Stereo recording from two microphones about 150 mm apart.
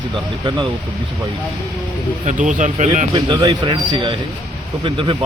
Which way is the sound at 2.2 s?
55° right (ahead or behind).